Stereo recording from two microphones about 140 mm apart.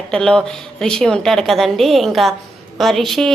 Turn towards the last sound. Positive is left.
turn(degrees=0)  # may be behind; listen again after turning